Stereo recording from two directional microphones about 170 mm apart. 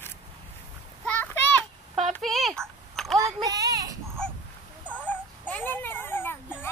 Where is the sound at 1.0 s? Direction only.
10° left (ahead or behind).